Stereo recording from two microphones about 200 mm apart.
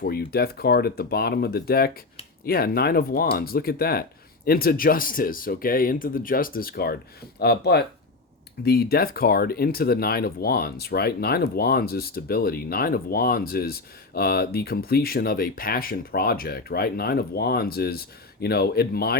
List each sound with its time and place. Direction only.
0.0 s speech: 50° left (ahead or behind)